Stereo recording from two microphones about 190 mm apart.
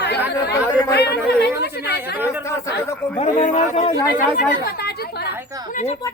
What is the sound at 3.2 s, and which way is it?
Speech, 35° left (ahead or behind).